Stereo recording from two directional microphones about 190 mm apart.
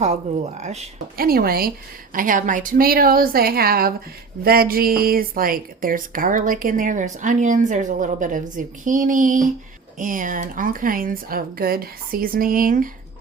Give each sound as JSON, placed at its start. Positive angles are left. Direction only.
{"t": 0.0, "sound": "speech", "side_deg": -35}
{"t": 1.1, "sound": "a woman's voice", "side_deg": -50}